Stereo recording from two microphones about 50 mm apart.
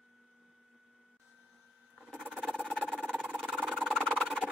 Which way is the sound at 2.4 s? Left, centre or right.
Centre.